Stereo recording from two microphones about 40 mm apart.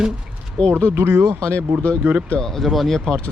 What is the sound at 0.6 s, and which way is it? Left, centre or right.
Speech, left.